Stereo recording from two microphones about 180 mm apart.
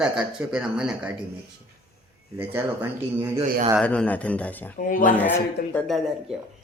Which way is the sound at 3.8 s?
5° left (ahead or behind).